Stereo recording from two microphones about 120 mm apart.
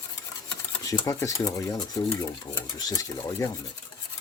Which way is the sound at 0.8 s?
30° left (ahead or behind).